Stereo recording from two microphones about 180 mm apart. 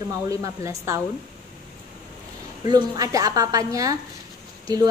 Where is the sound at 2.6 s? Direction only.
25° right (ahead or behind).